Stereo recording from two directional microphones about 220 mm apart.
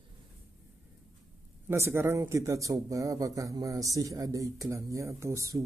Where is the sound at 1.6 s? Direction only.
10° right (ahead or behind).